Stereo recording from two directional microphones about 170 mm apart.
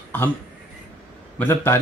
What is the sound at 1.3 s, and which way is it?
Speech, 15° left (ahead or behind).